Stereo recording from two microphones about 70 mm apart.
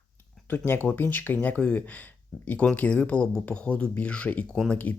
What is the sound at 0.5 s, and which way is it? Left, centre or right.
Speech, left.